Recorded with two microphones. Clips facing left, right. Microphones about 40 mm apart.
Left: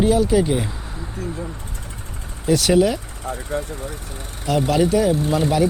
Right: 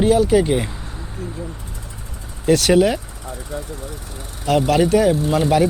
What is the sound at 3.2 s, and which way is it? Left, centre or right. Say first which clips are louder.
Speech: left 4 dB; left.